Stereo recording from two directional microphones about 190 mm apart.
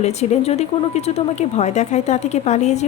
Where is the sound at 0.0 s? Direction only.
35° left (ahead or behind).